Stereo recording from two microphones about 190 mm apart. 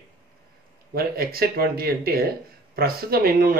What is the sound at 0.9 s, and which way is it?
Speech, 55° right (ahead or behind).